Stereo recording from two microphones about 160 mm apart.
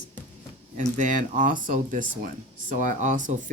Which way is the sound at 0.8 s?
50° right (ahead or behind).